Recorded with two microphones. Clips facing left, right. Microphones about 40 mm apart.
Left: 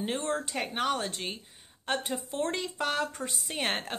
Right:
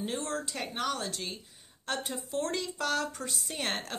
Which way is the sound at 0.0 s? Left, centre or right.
Left.